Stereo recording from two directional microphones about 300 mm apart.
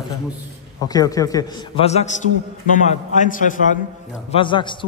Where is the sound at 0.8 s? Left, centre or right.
Centre.